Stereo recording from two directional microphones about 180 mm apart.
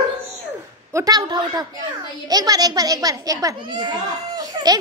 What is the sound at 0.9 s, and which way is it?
A child's voice, 20° right (ahead or behind).